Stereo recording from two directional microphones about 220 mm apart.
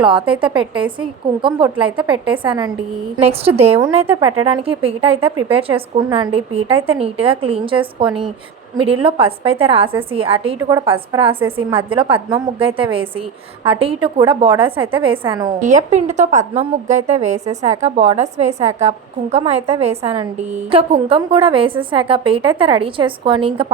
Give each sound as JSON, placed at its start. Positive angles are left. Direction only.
{"t": 0.0, "sound": "a woman's voice", "side_deg": -20}
{"t": 15.6, "sound": "a woman's voice", "side_deg": -35}